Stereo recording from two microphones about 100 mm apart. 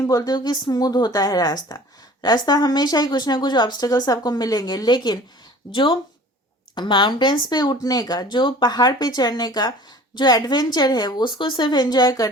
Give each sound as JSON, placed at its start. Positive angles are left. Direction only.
{"t": 0.0, "sound": "speech", "side_deg": 35}